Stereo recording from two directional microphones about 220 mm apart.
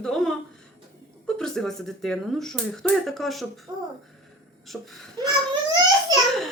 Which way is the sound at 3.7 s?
20° right (ahead or behind).